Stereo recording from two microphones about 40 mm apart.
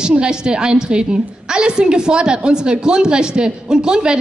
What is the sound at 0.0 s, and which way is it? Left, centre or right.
A woman's voice, right.